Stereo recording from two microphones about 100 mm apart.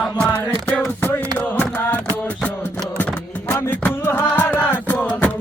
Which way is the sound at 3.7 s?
20° left (ahead or behind).